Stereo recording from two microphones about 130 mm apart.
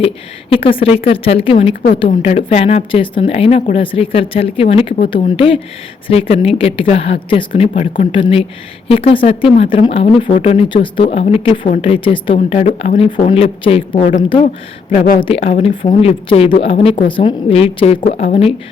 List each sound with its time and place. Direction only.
0.5 s speech: 45° left (ahead or behind)
2.0 s speech: 60° left (ahead or behind); by 12.5 s 40° left (ahead or behind)
12.5 s speech: 55° left (ahead or behind)
14.4 s speech: 80° left
15.2 s speech: 50° left (ahead or behind)